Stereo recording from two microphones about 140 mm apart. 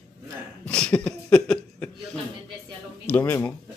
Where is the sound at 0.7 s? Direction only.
5° left (ahead or behind).